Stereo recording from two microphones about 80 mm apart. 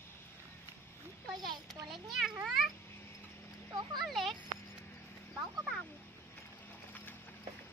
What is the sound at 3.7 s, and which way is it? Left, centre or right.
Speech, right.